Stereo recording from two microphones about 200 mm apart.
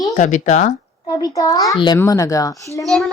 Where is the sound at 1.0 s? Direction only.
20° left (ahead or behind).